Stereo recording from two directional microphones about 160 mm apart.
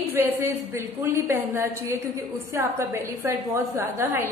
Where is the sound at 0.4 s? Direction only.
15° right (ahead or behind).